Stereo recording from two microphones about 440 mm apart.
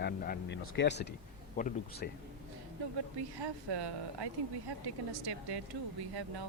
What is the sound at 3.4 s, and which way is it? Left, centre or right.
Speech, right.